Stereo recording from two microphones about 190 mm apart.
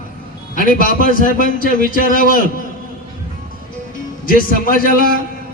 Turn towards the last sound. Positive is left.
turn(degrees=45)  # may be behind; listen again after turning